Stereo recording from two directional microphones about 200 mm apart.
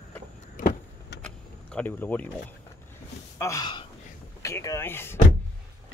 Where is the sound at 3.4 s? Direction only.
15° left (ahead or behind).